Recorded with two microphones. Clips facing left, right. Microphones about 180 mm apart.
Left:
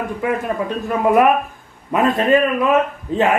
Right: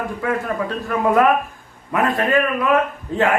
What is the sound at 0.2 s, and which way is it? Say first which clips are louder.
A man's voice: left 2 dB; 20° left (ahead or behind).